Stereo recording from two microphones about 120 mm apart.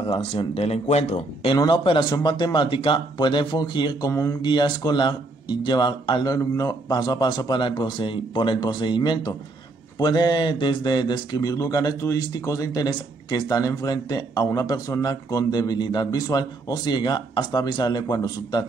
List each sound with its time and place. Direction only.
0.3 s speech: 55° left (ahead or behind)
1.5 s a man's voice: 40° left (ahead or behind)
4.1 s speech: 25° left (ahead or behind)
4.4 s a man's voice: 40° left (ahead or behind)
6.3 s a man's voice: 30° left (ahead or behind)